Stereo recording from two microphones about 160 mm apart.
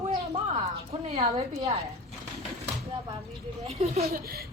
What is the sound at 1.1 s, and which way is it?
Speech, 40° right (ahead or behind).